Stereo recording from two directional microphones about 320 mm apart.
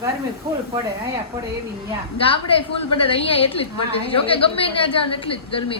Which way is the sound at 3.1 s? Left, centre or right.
Centre.